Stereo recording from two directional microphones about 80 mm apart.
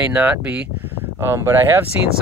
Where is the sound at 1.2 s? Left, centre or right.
Right.